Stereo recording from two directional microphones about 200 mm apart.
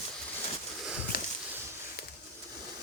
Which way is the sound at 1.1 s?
45° left (ahead or behind).